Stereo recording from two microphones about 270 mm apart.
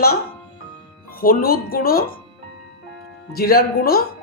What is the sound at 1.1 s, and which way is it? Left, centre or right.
Speech, left.